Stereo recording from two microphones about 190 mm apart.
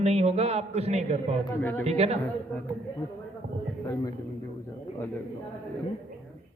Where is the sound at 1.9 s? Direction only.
35° right (ahead or behind).